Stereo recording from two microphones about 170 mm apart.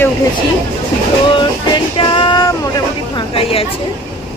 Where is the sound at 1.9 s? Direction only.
30° left (ahead or behind).